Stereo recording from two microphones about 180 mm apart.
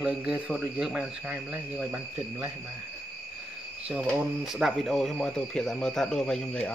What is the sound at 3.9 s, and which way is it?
Speech, centre (ahead or behind).